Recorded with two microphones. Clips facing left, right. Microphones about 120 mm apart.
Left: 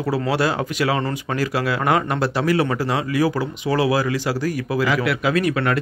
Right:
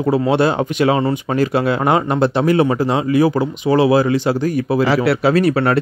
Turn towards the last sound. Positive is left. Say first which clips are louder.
# right 5 dB
turn(degrees=-35)  # may be behind; listen again after turning